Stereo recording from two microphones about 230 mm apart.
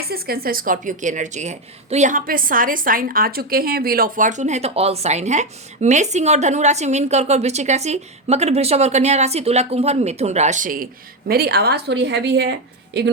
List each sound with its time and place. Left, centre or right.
0.1 s a woman's voice: right